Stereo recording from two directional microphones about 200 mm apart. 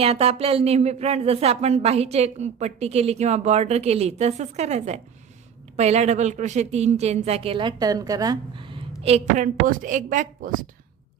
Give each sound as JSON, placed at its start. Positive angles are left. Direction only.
{"t": 0.0, "sound": "speech", "side_deg": -30}